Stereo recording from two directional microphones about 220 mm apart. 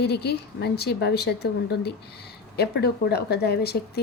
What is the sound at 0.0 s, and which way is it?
A woman's voice, 50° left (ahead or behind).